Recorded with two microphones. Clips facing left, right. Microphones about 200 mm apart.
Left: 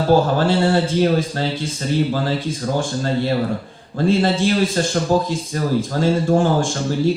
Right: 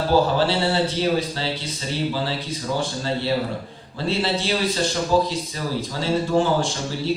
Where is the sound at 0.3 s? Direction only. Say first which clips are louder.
Left 4 dB; 50° left (ahead or behind).